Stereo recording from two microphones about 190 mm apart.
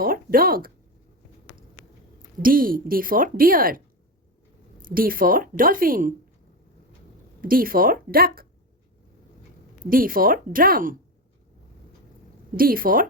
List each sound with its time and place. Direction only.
0.0 s speech: 50° right (ahead or behind)
2.4 s a woman's voice: 50° right (ahead or behind)
4.8 s a woman's voice: 45° right (ahead or behind)
7.4 s a woman's voice: 50° right (ahead or behind)
9.9 s a woman's voice: 50° right (ahead or behind)
12.5 s a woman's voice: 50° right (ahead or behind)